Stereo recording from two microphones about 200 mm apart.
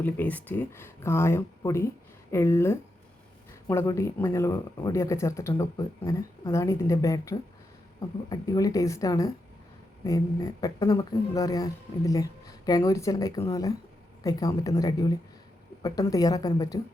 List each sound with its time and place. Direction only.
0.0 s a woman's voice: 10° left (ahead or behind)